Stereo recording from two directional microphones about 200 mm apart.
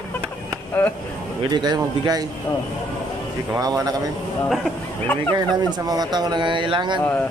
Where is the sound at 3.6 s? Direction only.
20° right (ahead or behind).